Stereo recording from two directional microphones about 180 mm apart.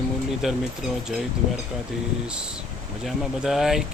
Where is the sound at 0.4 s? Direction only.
Centre (ahead or behind).